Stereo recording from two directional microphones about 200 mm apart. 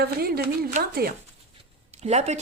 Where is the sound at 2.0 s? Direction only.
35° right (ahead or behind).